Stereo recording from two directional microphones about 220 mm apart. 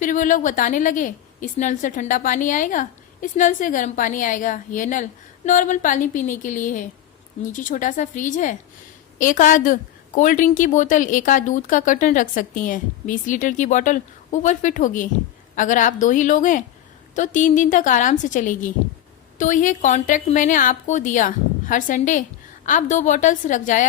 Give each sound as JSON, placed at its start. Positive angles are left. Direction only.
{"t": 0.0, "sound": "a woman's voice", "side_deg": 35}